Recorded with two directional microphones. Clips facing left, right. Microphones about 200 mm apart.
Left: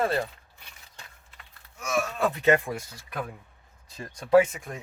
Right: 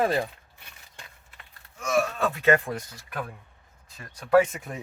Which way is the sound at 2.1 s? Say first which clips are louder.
Even; 15° left (ahead or behind).